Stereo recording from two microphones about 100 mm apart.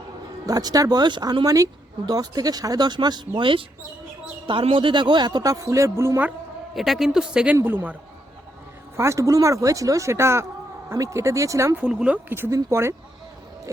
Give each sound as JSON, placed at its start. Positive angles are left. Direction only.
{"t": 0.4, "sound": "speech", "side_deg": -40}
{"t": 6.7, "sound": "speech", "side_deg": 0}
{"t": 7.5, "sound": "speech", "side_deg": -20}
{"t": 9.0, "sound": "speech", "side_deg": -30}
{"t": 11.8, "sound": "speech", "side_deg": -10}
{"t": 12.3, "sound": "speech", "side_deg": -25}